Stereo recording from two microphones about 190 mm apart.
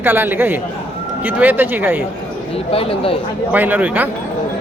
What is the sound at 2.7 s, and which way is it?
Speech, 30° left (ahead or behind).